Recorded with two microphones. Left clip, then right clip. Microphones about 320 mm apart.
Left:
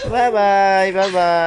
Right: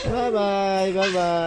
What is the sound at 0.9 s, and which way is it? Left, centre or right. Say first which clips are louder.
Speech: left 6 dB; left.